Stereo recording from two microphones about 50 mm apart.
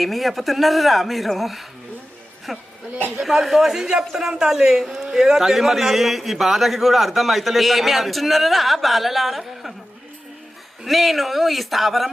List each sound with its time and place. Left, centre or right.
0.0 s a man's voice: centre
10.8 s a man's voice: centre